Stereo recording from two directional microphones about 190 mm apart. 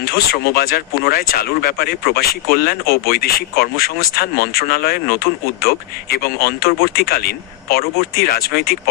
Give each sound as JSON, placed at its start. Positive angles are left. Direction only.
{"t": 0.0, "sound": "speech", "side_deg": 55}